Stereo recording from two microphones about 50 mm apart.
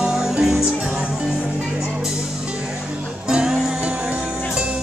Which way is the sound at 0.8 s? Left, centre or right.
Right.